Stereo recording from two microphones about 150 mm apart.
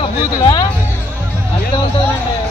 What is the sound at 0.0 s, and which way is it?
Speech, 30° left (ahead or behind).